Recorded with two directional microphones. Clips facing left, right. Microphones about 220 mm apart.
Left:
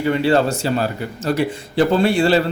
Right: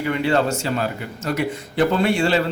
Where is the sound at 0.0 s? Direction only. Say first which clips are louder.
Left 3 dB; 35° left (ahead or behind).